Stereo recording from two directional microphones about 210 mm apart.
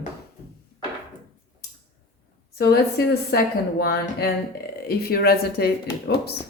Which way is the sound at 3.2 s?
45° left (ahead or behind).